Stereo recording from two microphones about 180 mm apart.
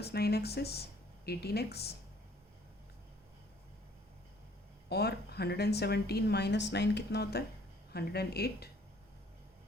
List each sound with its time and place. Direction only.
0.0 s speech: 60° left (ahead or behind)
4.9 s a woman's voice: 65° left (ahead or behind)